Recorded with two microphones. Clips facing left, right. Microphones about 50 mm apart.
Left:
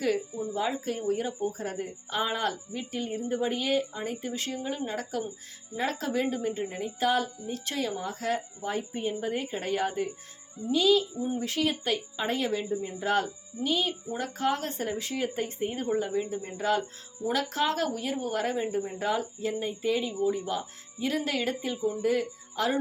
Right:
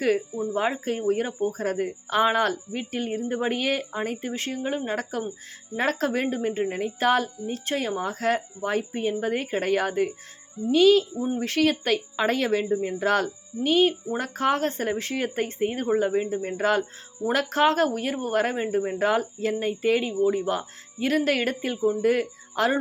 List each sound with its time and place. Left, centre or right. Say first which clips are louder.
0.5 s speech: right 4 dB; right
5.7 s speech: right 5 dB; right
7.4 s a woman's voice: right 4 dB; right
13.6 s a woman's voice: right 8 dB; right
21.8 s speech: right 6 dB; centre
22.0 s speech: right 4 dB; right